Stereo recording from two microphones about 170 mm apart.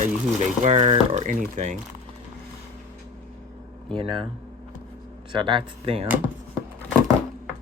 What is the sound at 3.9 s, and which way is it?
Speech, 30° right (ahead or behind).